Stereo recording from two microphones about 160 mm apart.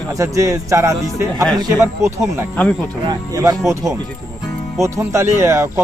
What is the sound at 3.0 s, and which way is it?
A man's voice, 25° right (ahead or behind).